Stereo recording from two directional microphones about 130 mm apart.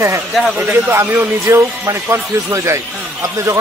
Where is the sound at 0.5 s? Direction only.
15° right (ahead or behind).